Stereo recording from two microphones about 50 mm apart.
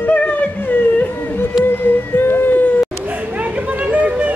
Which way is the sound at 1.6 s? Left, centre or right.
Left.